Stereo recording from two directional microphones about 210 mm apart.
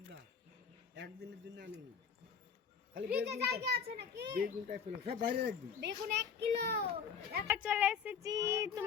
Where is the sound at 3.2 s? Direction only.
50° right (ahead or behind).